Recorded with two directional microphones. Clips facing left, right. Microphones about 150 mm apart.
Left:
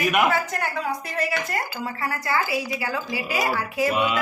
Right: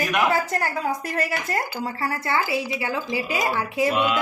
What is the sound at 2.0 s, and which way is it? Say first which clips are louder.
A woman's voice: even; 25° right (ahead or behind).